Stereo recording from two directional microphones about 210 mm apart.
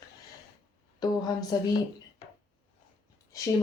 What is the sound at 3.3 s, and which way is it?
Speech, 15° left (ahead or behind).